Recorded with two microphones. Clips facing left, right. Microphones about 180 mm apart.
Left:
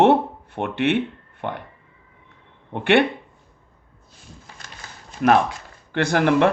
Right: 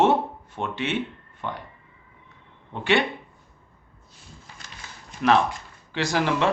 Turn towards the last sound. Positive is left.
turn(degrees=55)  # may be behind; listen again after turning